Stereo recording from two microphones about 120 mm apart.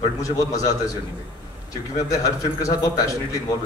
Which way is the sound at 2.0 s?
25° left (ahead or behind).